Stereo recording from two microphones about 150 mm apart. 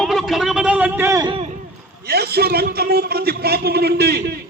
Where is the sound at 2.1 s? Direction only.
90° right.